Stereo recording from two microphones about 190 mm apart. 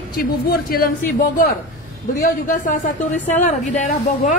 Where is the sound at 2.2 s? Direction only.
45° left (ahead or behind).